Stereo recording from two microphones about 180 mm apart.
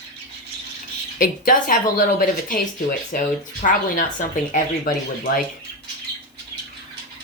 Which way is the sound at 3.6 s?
45° left (ahead or behind).